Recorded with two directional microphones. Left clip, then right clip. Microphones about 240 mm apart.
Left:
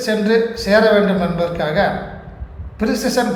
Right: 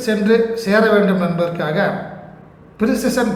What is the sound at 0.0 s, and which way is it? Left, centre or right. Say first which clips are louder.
A woman's voice: even; centre.